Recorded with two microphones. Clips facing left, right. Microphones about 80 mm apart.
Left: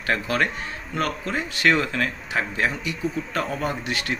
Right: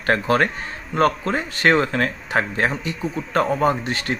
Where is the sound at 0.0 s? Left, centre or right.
Right.